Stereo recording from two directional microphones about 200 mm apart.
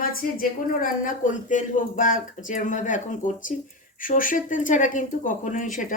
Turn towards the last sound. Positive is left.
turn(degrees=40)  # may be behind; listen again after turning